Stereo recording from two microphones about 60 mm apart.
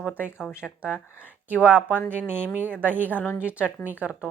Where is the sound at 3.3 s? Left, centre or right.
Right.